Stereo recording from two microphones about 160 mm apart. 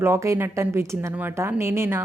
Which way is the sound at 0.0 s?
15° right (ahead or behind).